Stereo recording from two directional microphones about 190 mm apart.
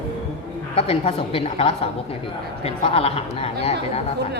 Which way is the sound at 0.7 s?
30° left (ahead or behind).